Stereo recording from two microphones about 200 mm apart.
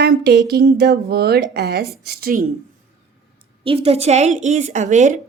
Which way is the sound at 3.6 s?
30° right (ahead or behind).